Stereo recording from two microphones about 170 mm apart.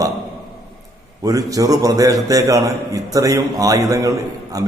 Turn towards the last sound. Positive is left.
turn(degrees=-20)  # may be behind; listen again after turning